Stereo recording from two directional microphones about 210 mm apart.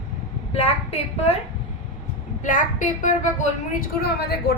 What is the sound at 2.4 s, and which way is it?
Speech, 40° left (ahead or behind).